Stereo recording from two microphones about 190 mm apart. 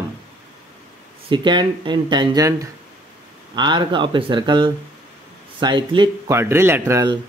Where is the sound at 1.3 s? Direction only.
25° right (ahead or behind).